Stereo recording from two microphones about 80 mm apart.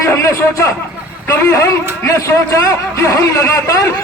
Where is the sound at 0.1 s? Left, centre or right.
Left.